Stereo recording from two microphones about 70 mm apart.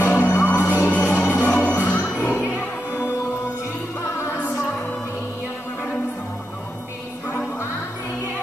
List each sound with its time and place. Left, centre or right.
0.0 s music: left